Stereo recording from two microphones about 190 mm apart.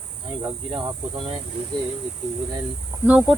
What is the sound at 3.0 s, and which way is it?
Speech, 10° right (ahead or behind).